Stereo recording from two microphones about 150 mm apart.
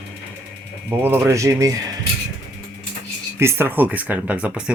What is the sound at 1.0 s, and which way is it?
Speech, 15° right (ahead or behind).